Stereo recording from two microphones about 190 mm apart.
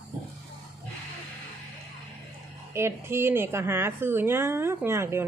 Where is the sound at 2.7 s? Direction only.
15° right (ahead or behind).